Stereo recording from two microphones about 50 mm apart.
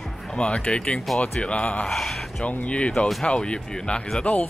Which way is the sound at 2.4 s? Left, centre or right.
Left.